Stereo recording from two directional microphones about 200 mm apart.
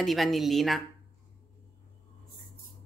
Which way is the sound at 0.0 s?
Centre (ahead or behind).